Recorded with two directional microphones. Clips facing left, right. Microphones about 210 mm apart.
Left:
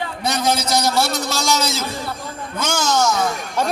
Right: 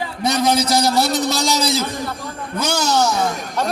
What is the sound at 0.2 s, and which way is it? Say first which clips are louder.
Speech: right 4 dB; 15° right (ahead or behind).